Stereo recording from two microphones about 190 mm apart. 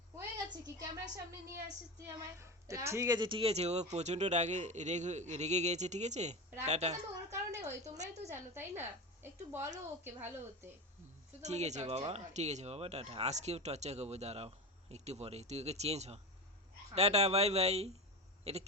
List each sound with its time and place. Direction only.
0.2 s a sound: 20° right (ahead or behind)
2.0 s speech: 15° right (ahead or behind); by 8.3 s 35° right (ahead or behind)
8.3 s a woman's voice: 10° right (ahead or behind)
11.4 s speech: 35° right (ahead or behind)